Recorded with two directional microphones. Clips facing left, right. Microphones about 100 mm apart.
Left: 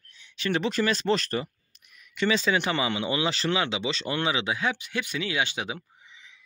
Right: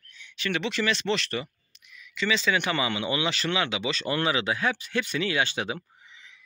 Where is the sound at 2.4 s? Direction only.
30° left (ahead or behind); by 6.4 s 15° left (ahead or behind).